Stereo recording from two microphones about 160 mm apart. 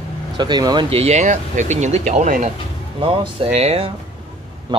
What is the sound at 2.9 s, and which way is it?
Speech, 35° right (ahead or behind).